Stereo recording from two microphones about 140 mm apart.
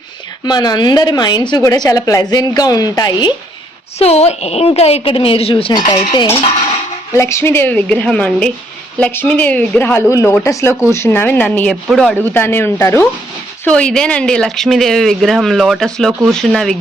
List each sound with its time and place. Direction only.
0.4 s a woman's voice: 30° left (ahead or behind)
3.9 s a woman's voice: 50° left (ahead or behind)
7.1 s speech: 20° left (ahead or behind)
13.7 s speech: 5° left (ahead or behind)